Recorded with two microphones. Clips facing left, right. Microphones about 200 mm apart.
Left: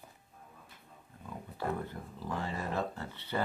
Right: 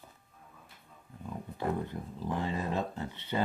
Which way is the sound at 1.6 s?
20° right (ahead or behind).